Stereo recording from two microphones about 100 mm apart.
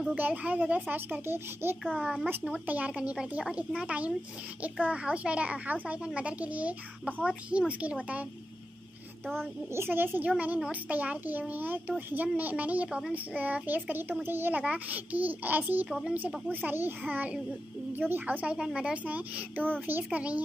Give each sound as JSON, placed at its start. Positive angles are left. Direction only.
{"t": 0.1, "sound": "a child's voice", "side_deg": -15}
{"t": 1.9, "sound": "a child's voice", "side_deg": 0}
{"t": 2.6, "sound": "a child's voice", "side_deg": -15}
{"t": 9.8, "sound": "a child's voice", "side_deg": -20}